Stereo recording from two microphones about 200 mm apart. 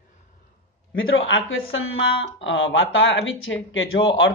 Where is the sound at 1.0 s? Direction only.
75° left (ahead or behind).